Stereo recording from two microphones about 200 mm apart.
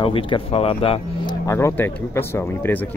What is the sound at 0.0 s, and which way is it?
Speech, 25° left (ahead or behind).